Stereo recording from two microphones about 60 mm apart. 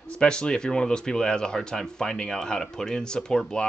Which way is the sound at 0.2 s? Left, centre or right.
Centre.